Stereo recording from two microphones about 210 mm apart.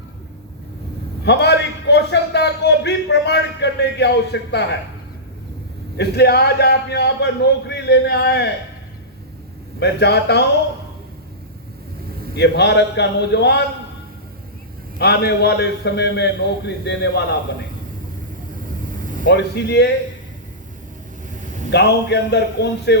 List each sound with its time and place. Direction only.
1.2 s a man's voice: 55° left (ahead or behind)
6.0 s a man's voice: 50° left (ahead or behind)
9.8 s a man's voice: 55° left (ahead or behind)
12.4 s a man's voice: 55° left (ahead or behind)
14.9 s a man's voice: 50° left (ahead or behind)
18.9 s air conditioning: 40° right (ahead or behind)
19.2 s a man's voice: 55° left (ahead or behind)
21.7 s a man's voice: 55° left (ahead or behind)